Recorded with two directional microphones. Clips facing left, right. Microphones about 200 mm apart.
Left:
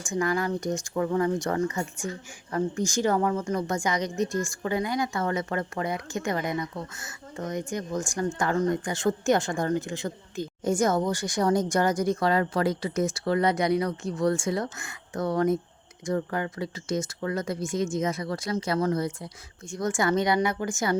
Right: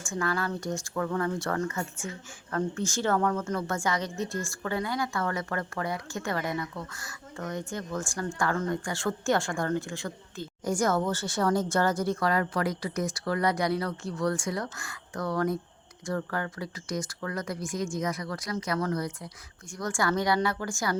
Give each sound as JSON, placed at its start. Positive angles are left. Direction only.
{"t": 0.0, "sound": "speech", "side_deg": 15}